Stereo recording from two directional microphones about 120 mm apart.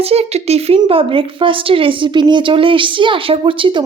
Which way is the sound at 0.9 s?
50° right (ahead or behind).